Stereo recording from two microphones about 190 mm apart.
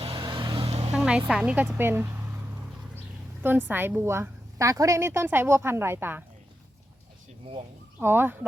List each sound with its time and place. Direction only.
0.0 s vehicle: 25° right (ahead or behind)
0.9 s a sound: 5° right (ahead or behind)
1.3 s a woman's voice: 5° right (ahead or behind)
3.4 s a woman's voice: 10° right (ahead or behind)
7.9 s a woman's voice: 10° right (ahead or behind)